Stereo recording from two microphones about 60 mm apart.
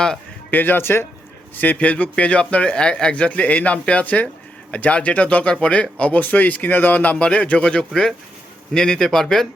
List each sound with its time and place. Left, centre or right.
0.5 s speech: left
1.5 s speech: left; by 9.5 s centre